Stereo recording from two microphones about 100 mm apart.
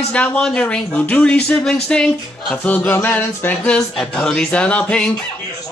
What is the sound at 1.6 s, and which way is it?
Speech, 5° left (ahead or behind).